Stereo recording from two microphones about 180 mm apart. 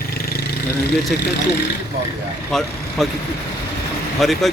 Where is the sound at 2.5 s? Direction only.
Centre (ahead or behind).